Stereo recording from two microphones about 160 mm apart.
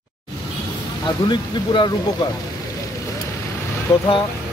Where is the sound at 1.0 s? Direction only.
30° left (ahead or behind).